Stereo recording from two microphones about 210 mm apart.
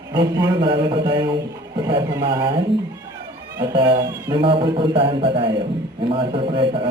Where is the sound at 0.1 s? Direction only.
20° right (ahead or behind).